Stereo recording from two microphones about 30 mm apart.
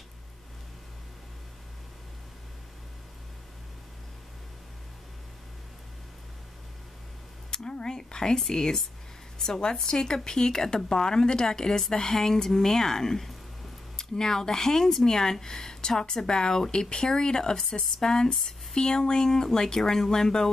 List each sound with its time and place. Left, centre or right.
7.5 s a woman's voice: left
9.8 s a woman's voice: left
18.3 s speech: centre
18.8 s speech: left